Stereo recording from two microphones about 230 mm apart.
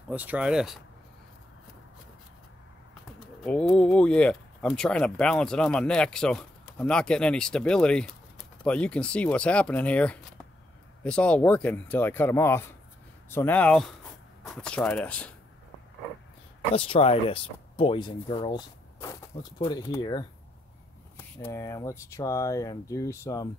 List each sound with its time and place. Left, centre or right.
0.1 s speech: centre
3.4 s speech: centre
16.7 s speech: left
19.6 s speech: centre